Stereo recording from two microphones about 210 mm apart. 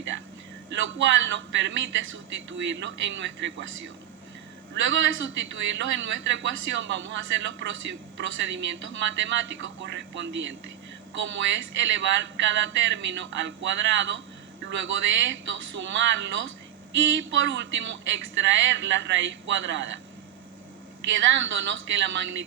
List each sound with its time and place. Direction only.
0.7 s speech: 65° right (ahead or behind)
21.1 s speech: 65° right (ahead or behind)